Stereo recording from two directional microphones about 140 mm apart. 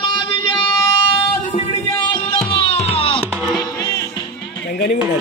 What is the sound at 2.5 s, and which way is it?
Music, 45° left (ahead or behind).